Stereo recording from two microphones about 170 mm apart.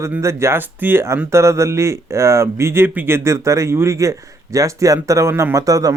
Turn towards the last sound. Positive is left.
turn(degrees=-20)  # may be behind; listen again after turning